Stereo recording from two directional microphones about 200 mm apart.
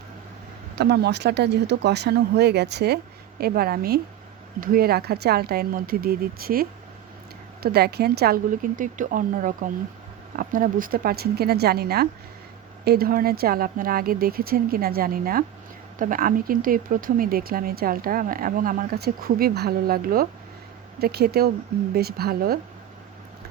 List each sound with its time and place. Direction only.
0.8 s speech: 55° right (ahead or behind)